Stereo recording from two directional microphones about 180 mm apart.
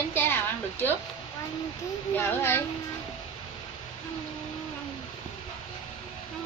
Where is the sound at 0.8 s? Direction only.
10° left (ahead or behind).